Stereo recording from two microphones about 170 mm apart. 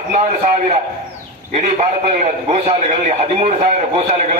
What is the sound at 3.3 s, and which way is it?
A man's voice, 40° right (ahead or behind).